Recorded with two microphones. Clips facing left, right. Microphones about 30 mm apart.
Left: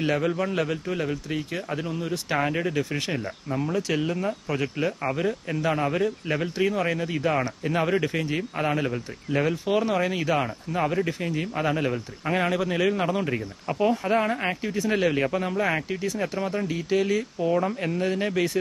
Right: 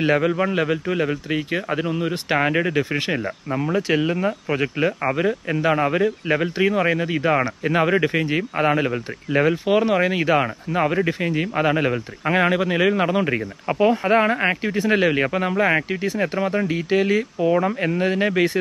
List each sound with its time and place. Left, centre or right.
0.0 s a man's voice: right